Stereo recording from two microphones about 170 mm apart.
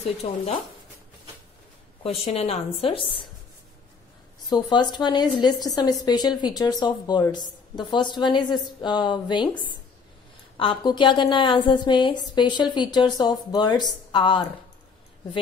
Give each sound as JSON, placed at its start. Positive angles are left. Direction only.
{"t": 0.2, "sound": "a woman's voice", "side_deg": 40}
{"t": 2.0, "sound": "a woman's voice", "side_deg": 40}
{"t": 4.5, "sound": "a woman's voice", "side_deg": 25}
{"t": 10.6, "sound": "a woman's voice", "side_deg": 30}